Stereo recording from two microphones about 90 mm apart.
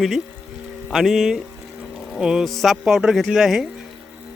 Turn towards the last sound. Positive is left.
turn(degrees=-5)  # may be behind; listen again after turning